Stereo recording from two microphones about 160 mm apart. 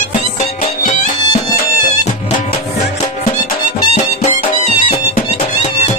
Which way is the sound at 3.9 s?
45° left (ahead or behind).